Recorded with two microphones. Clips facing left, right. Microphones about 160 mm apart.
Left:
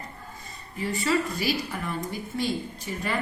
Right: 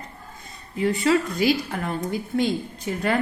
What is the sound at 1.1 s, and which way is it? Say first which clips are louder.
A woman's voice: right 5 dB; 65° right (ahead or behind).